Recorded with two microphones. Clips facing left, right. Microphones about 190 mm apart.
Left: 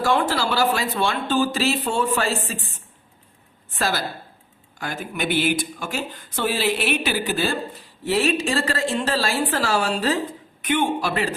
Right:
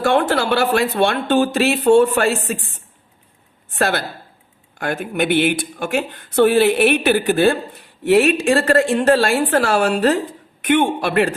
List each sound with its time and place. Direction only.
0.0 s speech: 60° right (ahead or behind)
3.8 s speech: 60° right (ahead or behind)